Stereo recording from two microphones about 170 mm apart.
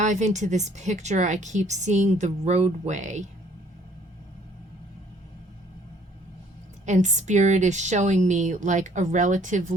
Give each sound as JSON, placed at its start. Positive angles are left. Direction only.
{"t": 0.0, "sound": "a woman's voice", "side_deg": -45}
{"t": 6.8, "sound": "a woman's voice", "side_deg": -45}